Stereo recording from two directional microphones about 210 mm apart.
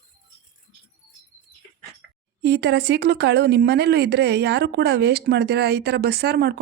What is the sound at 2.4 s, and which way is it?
Speech, 55° right (ahead or behind).